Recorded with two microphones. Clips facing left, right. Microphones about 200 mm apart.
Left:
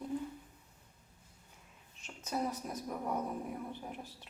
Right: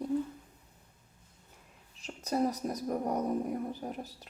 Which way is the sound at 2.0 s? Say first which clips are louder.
Right 7 dB; 40° right (ahead or behind).